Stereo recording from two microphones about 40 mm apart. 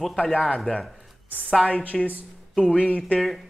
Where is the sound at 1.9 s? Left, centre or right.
Centre.